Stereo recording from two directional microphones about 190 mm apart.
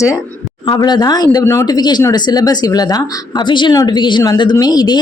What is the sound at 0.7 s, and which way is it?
Speech, 20° left (ahead or behind).